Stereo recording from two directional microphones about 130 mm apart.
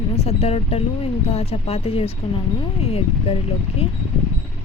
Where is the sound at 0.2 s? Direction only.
50° left (ahead or behind).